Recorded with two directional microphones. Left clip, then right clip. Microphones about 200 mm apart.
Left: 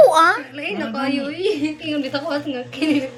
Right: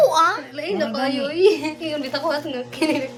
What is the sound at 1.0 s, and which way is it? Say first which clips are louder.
A woman's voice: right 5 dB; 35° right (ahead or behind).